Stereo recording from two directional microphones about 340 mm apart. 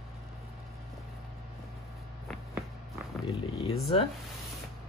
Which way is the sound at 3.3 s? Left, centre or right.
Centre.